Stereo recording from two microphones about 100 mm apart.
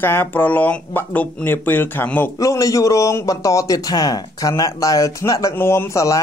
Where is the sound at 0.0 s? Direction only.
20° left (ahead or behind).